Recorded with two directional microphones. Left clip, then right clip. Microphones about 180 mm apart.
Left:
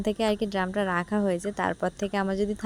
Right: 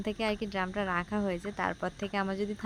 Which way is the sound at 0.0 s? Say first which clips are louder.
Left 6 dB; 35° left (ahead or behind).